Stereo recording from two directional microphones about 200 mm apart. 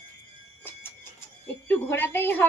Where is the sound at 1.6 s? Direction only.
10° left (ahead or behind).